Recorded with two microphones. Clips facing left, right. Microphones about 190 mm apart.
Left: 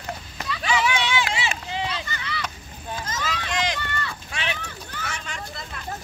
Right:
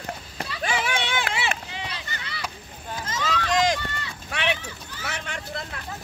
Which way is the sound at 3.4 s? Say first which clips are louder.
Right 7 dB; 40° right (ahead or behind).